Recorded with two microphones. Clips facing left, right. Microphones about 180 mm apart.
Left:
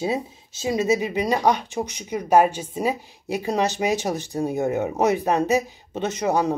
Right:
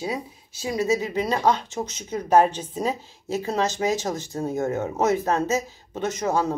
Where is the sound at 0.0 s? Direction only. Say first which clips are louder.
Left 4 dB; 25° left (ahead or behind).